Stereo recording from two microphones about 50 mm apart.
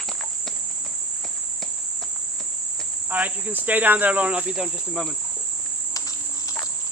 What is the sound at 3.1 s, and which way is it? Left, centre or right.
Cricket, right.